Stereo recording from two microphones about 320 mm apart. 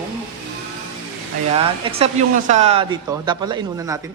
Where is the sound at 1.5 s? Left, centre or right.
Centre.